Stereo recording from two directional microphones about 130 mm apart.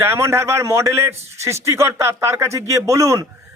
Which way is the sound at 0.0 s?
20° right (ahead or behind).